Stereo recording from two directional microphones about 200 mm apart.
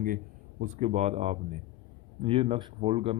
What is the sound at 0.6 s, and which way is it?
Speech, 35° right (ahead or behind).